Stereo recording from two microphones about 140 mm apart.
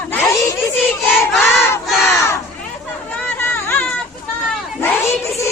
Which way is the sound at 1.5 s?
20° left (ahead or behind).